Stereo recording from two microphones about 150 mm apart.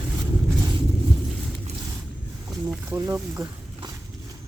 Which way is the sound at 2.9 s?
20° right (ahead or behind).